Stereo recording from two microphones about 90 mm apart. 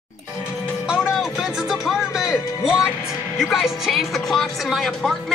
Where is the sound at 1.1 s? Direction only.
5° right (ahead or behind).